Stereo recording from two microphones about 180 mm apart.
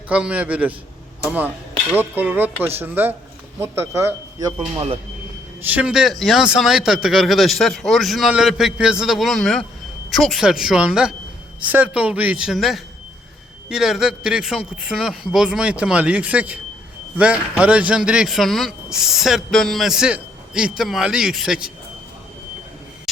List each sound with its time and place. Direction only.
0.1 s speech: 5° right (ahead or behind)
5.6 s speech: 5° right (ahead or behind)
23.1 s train: centre (ahead or behind)